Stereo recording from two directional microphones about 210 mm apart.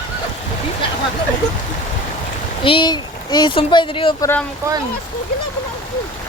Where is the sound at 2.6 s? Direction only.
20° left (ahead or behind).